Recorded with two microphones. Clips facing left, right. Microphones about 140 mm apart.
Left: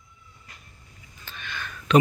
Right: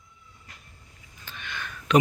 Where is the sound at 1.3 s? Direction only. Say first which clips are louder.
Left 1 dB; 15° right (ahead or behind).